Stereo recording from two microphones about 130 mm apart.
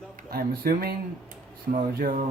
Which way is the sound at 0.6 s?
90° right.